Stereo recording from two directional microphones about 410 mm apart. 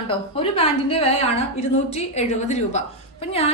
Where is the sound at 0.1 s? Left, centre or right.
Centre.